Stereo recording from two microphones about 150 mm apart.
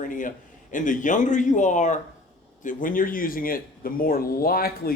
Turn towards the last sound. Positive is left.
turn(degrees=80)